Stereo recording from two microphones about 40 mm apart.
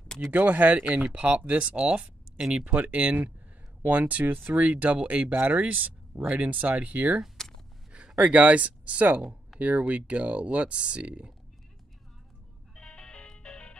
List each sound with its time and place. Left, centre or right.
0.3 s speech: right
7.4 s gasp: centre
8.2 s speech: right
12.7 s music: left